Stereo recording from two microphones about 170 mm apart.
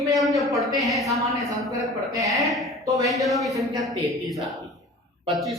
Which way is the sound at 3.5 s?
20° right (ahead or behind).